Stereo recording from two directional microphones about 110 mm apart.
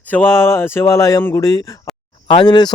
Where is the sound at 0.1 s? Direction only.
20° left (ahead or behind).